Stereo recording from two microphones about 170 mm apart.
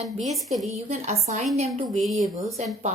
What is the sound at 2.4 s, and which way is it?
Speech, centre (ahead or behind).